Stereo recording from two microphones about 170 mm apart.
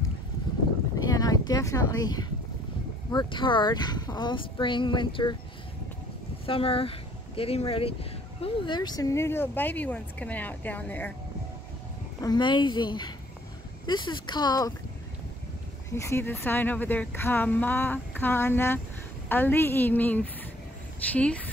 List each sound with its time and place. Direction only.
0.9 s a sound: 20° left (ahead or behind)
3.1 s speech: 25° left (ahead or behind)
6.4 s speech: 30° left (ahead or behind); by 11.1 s 10° left (ahead or behind)
12.2 s speech: 25° left (ahead or behind)
15.9 s speech: 15° left (ahead or behind)